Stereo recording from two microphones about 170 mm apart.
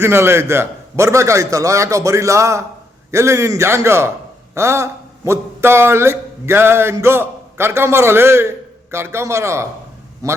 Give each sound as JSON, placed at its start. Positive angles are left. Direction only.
{"t": 0.0, "sound": "a man's voice", "side_deg": -15}